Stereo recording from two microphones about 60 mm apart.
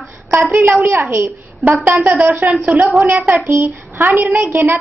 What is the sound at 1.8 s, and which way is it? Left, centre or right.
Speech, right.